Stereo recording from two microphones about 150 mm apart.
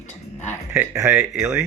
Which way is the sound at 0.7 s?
15° right (ahead or behind).